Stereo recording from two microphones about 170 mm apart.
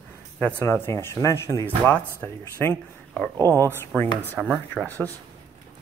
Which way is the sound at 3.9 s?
10° left (ahead or behind).